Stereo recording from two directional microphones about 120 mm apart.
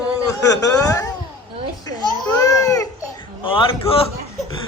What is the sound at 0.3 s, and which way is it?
Speech, 30° left (ahead or behind).